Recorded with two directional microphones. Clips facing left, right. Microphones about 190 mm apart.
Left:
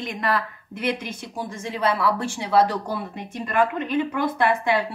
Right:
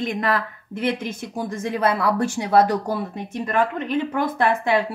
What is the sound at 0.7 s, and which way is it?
Speech, 50° right (ahead or behind).